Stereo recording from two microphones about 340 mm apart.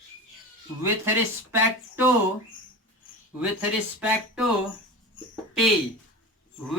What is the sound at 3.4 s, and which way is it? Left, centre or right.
Speech, centre.